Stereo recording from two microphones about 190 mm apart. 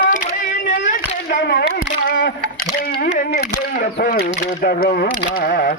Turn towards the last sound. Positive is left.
turn(degrees=50)  # may be behind; listen again after turning